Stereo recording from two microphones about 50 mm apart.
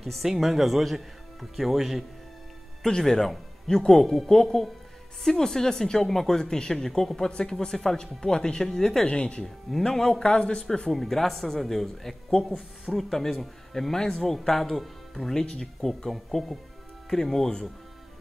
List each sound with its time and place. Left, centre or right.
0.0 s speech: centre
2.8 s speech: centre
9.0 s speech: centre
9.7 s speech: centre
12.4 s speech: centre